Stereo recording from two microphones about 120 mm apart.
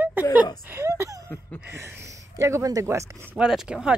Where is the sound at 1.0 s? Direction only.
30° right (ahead or behind).